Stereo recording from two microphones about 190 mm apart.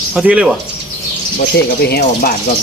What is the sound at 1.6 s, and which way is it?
Speech, 55° left (ahead or behind).